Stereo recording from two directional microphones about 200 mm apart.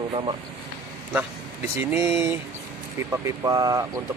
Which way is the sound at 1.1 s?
10° right (ahead or behind).